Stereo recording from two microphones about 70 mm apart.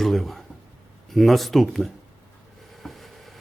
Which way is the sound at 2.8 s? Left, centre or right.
Centre.